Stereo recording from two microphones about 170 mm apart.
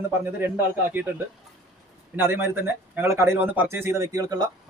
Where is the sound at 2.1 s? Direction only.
15° right (ahead or behind).